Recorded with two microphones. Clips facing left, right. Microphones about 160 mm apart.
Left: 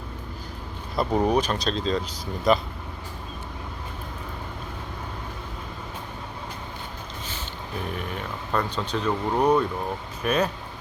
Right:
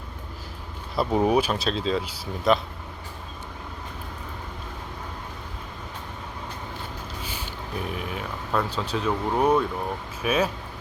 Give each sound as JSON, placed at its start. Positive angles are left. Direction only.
{"t": 0.9, "sound": "speech", "side_deg": -5}
{"t": 7.9, "sound": "speech", "side_deg": -5}